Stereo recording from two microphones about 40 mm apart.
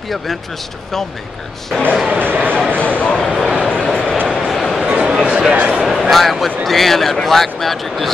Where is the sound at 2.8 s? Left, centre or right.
Left.